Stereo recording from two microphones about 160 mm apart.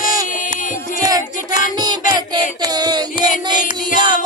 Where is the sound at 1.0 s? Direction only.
25° right (ahead or behind).